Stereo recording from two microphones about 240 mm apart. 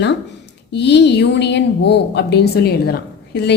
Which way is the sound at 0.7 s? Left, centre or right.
Left.